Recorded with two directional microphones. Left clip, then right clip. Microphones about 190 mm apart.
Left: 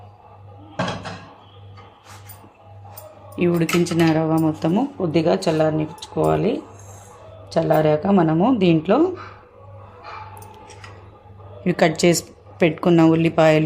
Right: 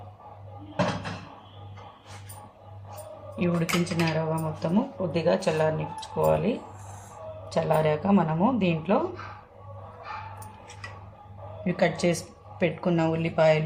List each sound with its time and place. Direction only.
3.3 s speech: 55° left (ahead or behind)
11.6 s speech: 50° left (ahead or behind)